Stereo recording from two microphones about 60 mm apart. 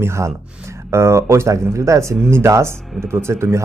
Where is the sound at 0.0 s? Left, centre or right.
Right.